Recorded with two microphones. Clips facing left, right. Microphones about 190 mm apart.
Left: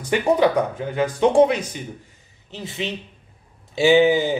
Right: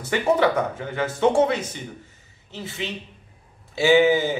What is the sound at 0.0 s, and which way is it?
Speech, 15° left (ahead or behind).